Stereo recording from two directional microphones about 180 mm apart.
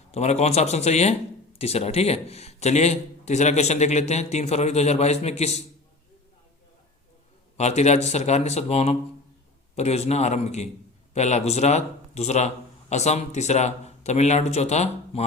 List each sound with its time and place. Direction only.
0.1 s a man's voice: 35° left (ahead or behind)
7.5 s a man's voice: 40° left (ahead or behind)